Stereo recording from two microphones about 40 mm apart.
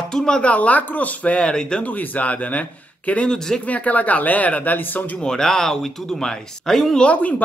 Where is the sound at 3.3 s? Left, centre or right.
Centre.